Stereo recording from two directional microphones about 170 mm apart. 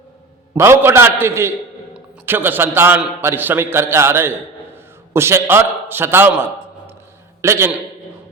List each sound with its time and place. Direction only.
0.5 s a man's voice: 15° right (ahead or behind)